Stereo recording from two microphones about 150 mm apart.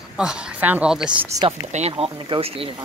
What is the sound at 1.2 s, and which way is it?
Speech, 20° right (ahead or behind).